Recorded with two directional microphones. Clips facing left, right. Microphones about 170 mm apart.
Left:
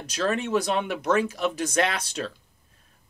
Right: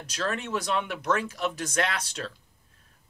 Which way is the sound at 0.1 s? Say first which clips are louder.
Left 6 dB; 20° left (ahead or behind).